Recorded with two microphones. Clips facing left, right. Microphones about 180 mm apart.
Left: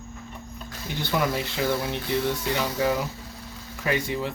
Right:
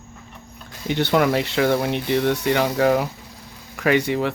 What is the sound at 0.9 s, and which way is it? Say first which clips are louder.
Speech: right 8 dB; 70° right (ahead or behind).